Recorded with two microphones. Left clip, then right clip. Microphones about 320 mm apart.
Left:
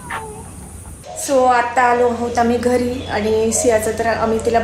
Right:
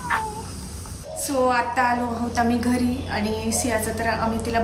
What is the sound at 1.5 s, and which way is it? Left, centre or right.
A woman's voice, centre.